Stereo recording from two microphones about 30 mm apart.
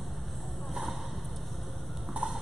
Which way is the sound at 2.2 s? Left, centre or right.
Right.